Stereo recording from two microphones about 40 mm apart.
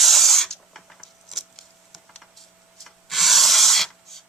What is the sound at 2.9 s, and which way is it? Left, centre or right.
Rub, centre.